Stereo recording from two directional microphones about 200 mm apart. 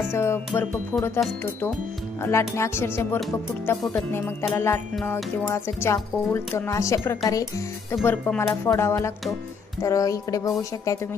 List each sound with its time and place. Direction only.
0.1 s speech: 10° left (ahead or behind)
2.2 s speech: 15° left (ahead or behind)